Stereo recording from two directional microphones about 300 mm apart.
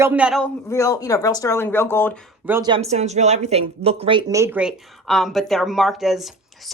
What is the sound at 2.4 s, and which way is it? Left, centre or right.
Speech, centre.